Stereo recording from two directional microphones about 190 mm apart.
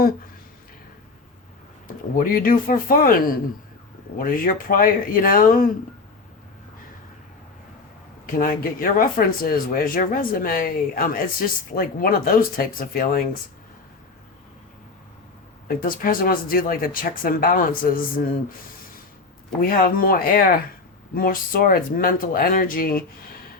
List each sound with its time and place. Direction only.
2.1 s speech: 50° left (ahead or behind)
8.3 s speech: 50° left (ahead or behind)
15.6 s speech: 50° left (ahead or behind)
19.6 s speech: 50° left (ahead or behind)